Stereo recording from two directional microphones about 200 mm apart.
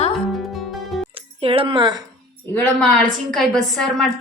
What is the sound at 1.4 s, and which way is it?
Speech, 25° right (ahead or behind).